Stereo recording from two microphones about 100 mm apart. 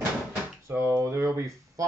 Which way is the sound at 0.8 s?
30° right (ahead or behind).